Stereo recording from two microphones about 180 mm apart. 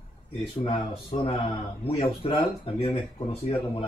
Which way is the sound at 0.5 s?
30° left (ahead or behind).